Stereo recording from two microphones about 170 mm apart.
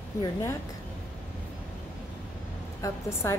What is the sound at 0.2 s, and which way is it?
Speech, 15° left (ahead or behind).